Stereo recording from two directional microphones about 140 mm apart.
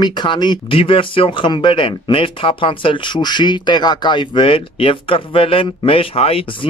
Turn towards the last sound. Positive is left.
turn(degrees=45)  # may be behind; listen again after turning